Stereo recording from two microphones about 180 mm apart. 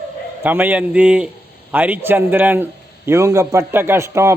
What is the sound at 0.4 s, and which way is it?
Speech, 10° right (ahead or behind).